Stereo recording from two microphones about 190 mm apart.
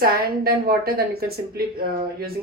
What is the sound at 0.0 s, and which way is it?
Speech, 55° right (ahead or behind).